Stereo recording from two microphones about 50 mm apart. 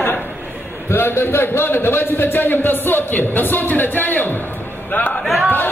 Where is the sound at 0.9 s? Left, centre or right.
Left.